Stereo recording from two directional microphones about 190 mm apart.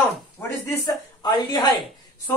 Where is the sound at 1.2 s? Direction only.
20° left (ahead or behind).